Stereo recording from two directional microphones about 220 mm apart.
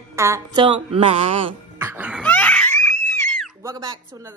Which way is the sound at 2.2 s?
5° left (ahead or behind).